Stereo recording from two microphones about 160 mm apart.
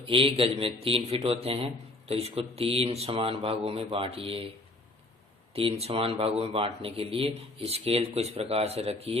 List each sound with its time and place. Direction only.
0.1 s a man's voice: 35° right (ahead or behind)
5.8 s a man's voice: 35° right (ahead or behind)